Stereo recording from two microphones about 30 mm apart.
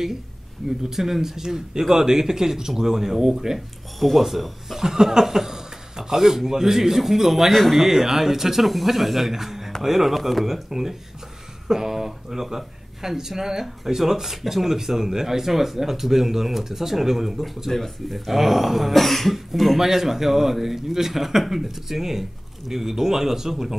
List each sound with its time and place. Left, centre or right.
0.7 s speech: centre
3.5 s speech: centre
10.4 s speech: centre
17.6 s speech: centre
18.1 s speech: centre
18.9 s speech: centre
19.9 s speech: centre